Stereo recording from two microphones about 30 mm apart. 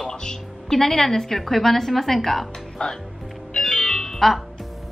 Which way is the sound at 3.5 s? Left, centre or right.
Centre.